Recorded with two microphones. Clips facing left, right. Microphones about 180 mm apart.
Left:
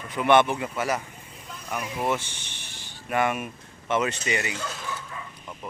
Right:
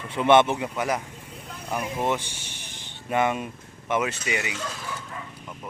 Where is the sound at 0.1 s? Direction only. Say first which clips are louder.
Right 1 dB; 25° right (ahead or behind).